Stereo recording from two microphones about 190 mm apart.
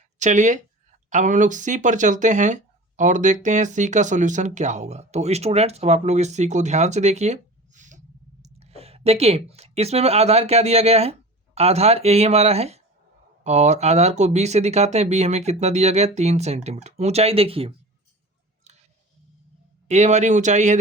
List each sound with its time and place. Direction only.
0.2 s speech: 40° right (ahead or behind)
19.9 s speech: 35° right (ahead or behind)